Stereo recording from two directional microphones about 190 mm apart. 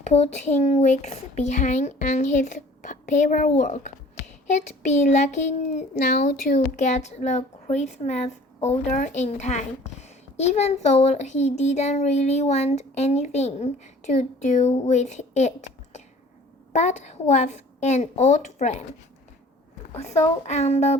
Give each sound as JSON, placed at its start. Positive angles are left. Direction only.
{"t": 0.0, "sound": "a child's voice", "side_deg": 35}
{"t": 19.9, "sound": "a woman's voice", "side_deg": 35}